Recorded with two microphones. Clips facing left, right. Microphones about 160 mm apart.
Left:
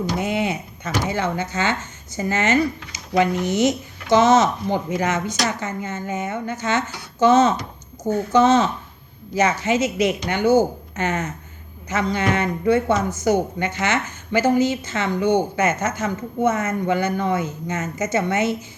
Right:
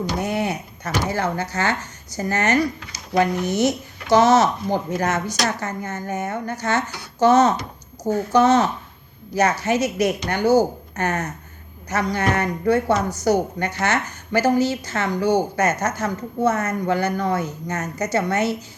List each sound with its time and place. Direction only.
0.2 s speech: 20° left (ahead or behind)